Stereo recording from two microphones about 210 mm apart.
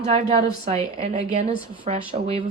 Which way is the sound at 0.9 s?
35° right (ahead or behind).